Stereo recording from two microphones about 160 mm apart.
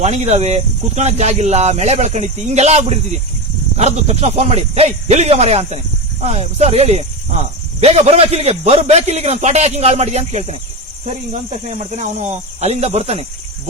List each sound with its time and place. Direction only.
0.0 s speech: 45° right (ahead or behind)